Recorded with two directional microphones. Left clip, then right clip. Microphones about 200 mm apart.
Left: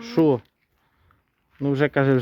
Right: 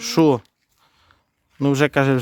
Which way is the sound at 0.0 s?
40° right (ahead or behind).